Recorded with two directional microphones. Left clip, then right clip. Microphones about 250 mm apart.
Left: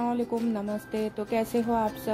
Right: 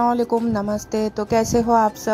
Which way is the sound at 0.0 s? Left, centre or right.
Right.